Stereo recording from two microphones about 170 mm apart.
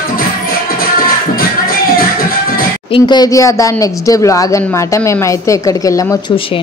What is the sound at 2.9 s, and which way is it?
Speech, 25° left (ahead or behind).